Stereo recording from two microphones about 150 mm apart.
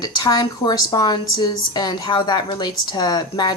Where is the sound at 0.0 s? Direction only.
25° left (ahead or behind).